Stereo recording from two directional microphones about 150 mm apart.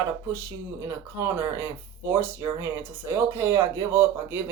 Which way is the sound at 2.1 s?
15° right (ahead or behind).